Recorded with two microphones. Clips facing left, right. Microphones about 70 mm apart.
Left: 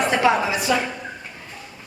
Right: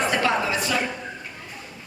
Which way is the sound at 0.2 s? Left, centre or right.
Centre.